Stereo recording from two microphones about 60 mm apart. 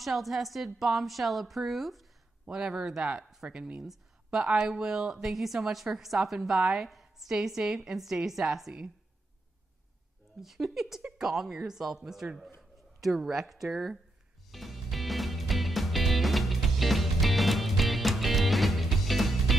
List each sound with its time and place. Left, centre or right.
0.0 s speech: centre
2.4 s speech: centre
10.4 s speech: centre
11.0 s speech: centre
11.2 s speech: centre
14.5 s music: centre